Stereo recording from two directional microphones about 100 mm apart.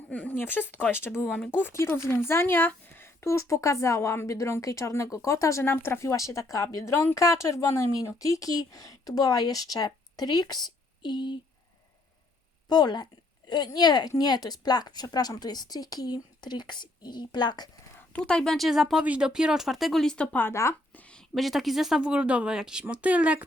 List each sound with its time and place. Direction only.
0.1 s a woman's voice: 15° left (ahead or behind); by 11.3 s 50° left (ahead or behind)
12.6 s a woman's voice: 45° left (ahead or behind)
18.2 s speech: 10° left (ahead or behind)
20.5 s speech: 30° left (ahead or behind)
20.9 s a woman's voice: 10° left (ahead or behind); by 23.5 s 15° right (ahead or behind)